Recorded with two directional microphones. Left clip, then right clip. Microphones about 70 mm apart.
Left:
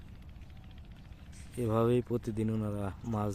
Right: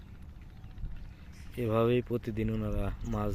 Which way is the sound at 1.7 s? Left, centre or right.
Left.